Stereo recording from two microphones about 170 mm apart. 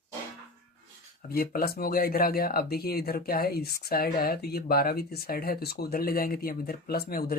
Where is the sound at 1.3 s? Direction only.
60° left (ahead or behind).